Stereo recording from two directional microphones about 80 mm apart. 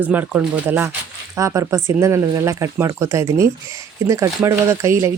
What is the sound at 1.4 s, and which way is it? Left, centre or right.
Speech, right.